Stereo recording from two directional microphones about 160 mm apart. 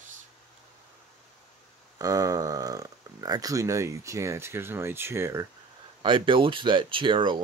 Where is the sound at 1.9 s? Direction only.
20° right (ahead or behind).